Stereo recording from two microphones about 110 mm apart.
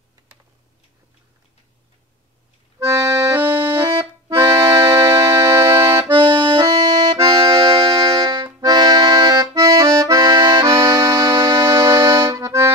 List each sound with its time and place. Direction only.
2.8 s accordion: 30° right (ahead or behind)
3.3 s music: 20° right (ahead or behind)
3.7 s accordion: 30° right (ahead or behind)